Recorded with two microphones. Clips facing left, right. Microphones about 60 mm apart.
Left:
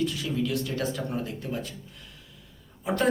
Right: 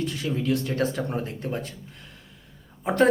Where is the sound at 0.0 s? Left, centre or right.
Right.